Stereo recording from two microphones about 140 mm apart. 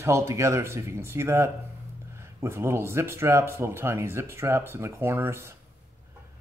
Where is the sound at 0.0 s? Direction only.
20° right (ahead or behind).